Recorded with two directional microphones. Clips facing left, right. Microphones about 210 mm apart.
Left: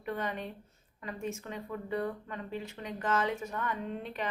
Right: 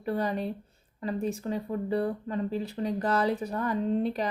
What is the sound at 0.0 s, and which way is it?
Speech, 35° right (ahead or behind).